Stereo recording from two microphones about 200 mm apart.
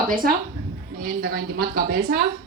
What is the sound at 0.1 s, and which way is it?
A woman's voice, 45° right (ahead or behind).